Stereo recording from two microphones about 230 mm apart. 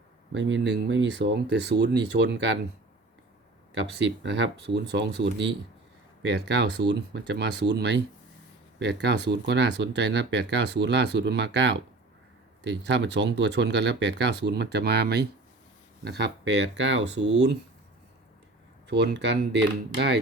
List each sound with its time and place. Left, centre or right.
0.3 s speech: right
3.9 s speech: right
18.9 s speech: right